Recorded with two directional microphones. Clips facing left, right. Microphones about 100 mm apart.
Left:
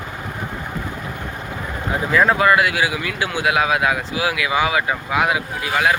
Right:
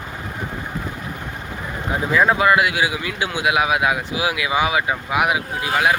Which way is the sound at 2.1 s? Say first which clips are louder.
Left 1 dB; 15° right (ahead or behind).